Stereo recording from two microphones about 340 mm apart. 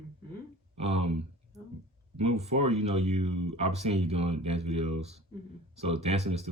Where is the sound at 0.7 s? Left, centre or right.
Centre.